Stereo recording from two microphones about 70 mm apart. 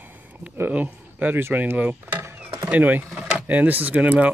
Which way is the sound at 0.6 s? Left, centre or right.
Right.